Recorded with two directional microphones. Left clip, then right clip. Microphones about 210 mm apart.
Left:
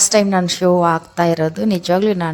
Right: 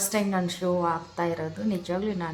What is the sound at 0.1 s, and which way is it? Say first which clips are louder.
Speech: left 13 dB; 40° left (ahead or behind).